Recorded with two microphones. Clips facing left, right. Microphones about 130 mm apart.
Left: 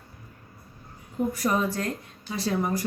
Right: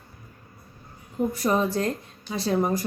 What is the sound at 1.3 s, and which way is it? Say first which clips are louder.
Speech: right 2 dB; 25° right (ahead or behind).